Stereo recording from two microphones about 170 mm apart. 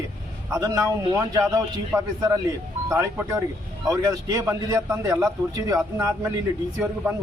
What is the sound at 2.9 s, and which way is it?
A man's voice, 15° right (ahead or behind).